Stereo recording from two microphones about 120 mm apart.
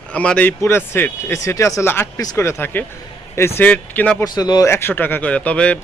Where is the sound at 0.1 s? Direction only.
10° left (ahead or behind).